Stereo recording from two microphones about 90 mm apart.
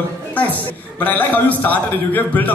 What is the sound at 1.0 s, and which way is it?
A man's voice, 20° left (ahead or behind).